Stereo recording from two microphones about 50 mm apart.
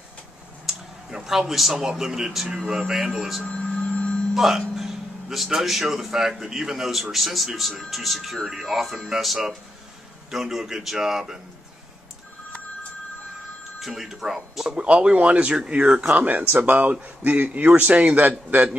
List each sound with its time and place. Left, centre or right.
0.7 s speech: centre
3.4 s a sound: left
4.3 s a man's voice: centre
13.7 s speech: centre
14.8 s speech: right
16.2 s speech: right